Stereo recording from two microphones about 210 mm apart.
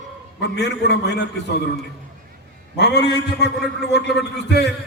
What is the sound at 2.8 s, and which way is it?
A man's voice, 55° left (ahead or behind).